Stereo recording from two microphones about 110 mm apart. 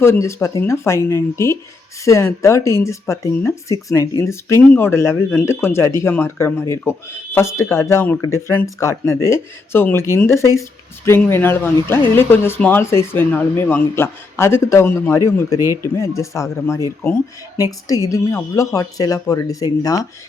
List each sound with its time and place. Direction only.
0.0 s speech: 25° left (ahead or behind)
15.5 s speech: 25° right (ahead or behind)
15.8 s speech: 25° left (ahead or behind)